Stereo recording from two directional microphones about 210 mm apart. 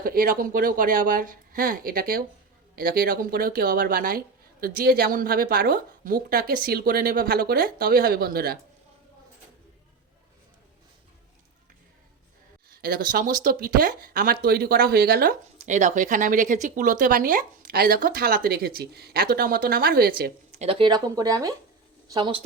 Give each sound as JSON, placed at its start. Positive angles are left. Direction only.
{"t": 0.0, "sound": "speech", "side_deg": -45}
{"t": 12.8, "sound": "speech", "side_deg": -45}
{"t": 20.5, "sound": "speech", "side_deg": -30}